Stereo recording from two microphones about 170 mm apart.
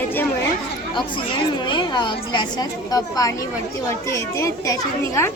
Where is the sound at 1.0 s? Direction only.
30° left (ahead or behind).